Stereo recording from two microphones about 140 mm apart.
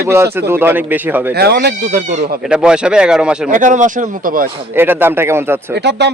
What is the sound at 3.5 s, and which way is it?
Speech, 65° right (ahead or behind).